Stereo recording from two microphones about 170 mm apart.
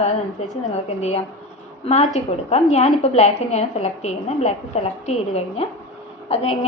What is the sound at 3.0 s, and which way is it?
A woman's voice, 40° left (ahead or behind).